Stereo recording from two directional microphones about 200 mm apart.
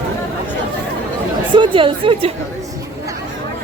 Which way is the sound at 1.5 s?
25° right (ahead or behind).